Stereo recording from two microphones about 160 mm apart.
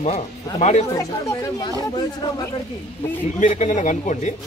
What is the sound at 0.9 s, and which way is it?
Speech, 20° left (ahead or behind).